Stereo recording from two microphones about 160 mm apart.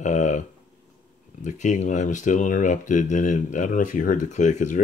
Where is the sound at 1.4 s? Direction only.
50° left (ahead or behind).